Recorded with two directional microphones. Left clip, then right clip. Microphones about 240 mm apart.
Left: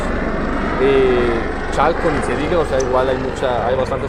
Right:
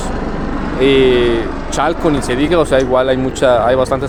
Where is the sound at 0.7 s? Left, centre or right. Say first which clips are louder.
Right 4 dB; right.